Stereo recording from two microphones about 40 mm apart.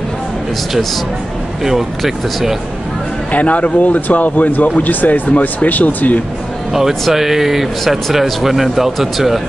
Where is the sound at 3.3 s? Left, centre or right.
Left.